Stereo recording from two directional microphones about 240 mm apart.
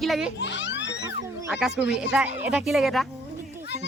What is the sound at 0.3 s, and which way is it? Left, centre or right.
Children playing, left.